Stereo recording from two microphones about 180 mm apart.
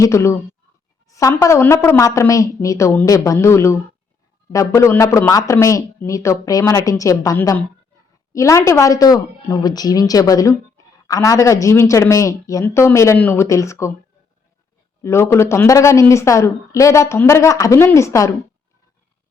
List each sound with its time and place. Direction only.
0.0 s a woman's voice: 15° left (ahead or behind)
15.0 s a woman's voice: 15° left (ahead or behind)